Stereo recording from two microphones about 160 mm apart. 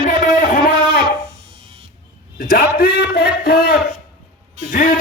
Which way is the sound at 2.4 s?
90° left.